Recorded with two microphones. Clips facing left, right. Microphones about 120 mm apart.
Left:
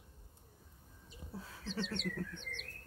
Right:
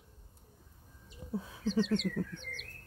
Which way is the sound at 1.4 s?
15° right (ahead or behind).